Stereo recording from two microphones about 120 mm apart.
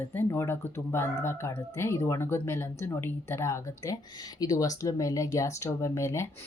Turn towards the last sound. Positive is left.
turn(degrees=25)  # may be behind; listen again after turning